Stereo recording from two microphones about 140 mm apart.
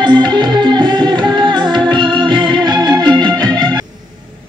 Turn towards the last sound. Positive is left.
turn(degrees=-30)  # may be behind; listen again after turning